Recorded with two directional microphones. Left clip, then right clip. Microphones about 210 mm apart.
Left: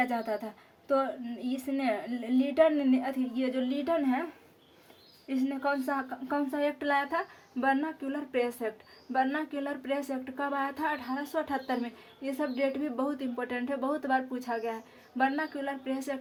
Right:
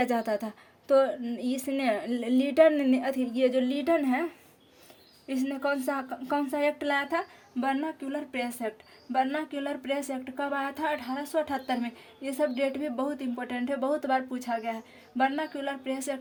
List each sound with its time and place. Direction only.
0.0 s speech: 50° right (ahead or behind)
5.3 s speech: 50° right (ahead or behind)